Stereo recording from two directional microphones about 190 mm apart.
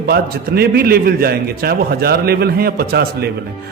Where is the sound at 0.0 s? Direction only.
55° right (ahead or behind).